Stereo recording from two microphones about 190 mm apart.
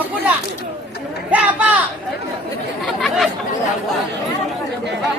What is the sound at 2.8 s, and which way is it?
Chatter, centre (ahead or behind).